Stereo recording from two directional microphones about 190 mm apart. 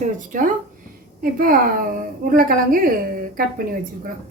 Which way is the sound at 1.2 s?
50° right (ahead or behind).